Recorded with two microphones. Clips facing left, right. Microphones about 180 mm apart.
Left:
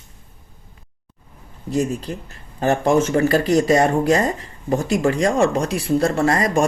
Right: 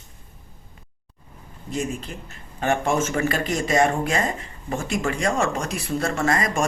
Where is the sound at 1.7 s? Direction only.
35° left (ahead or behind).